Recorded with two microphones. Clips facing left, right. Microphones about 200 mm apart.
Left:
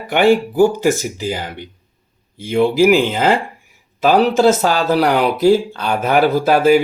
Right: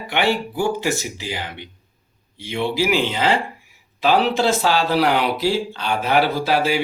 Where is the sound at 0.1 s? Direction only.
45° left (ahead or behind).